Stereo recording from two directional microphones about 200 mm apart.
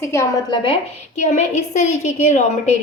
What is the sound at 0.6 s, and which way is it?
A woman's voice, 30° left (ahead or behind).